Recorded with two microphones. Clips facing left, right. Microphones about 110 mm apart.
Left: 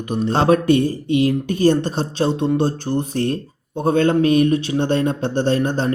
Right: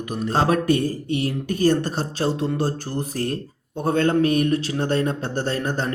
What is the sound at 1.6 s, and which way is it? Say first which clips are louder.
A man's voice: left 2 dB; 20° left (ahead or behind).